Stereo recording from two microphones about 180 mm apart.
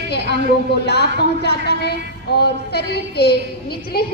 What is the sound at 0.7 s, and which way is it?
A woman's voice, 65° left (ahead or behind).